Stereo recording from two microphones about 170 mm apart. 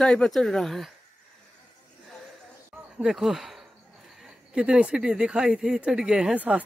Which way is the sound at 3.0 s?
Centre (ahead or behind).